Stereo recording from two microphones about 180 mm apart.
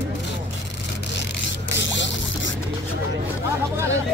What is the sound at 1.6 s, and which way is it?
Zipper, 85° left.